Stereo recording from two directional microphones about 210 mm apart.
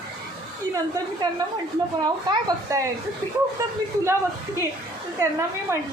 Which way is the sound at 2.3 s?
15° right (ahead or behind).